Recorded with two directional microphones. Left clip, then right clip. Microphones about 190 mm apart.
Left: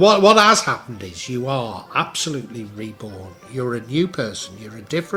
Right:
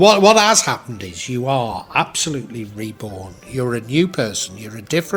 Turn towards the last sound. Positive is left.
turn(degrees=-40)  # may be behind; listen again after turning